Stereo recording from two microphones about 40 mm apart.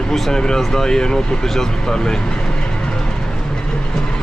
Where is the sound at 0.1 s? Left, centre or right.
Centre.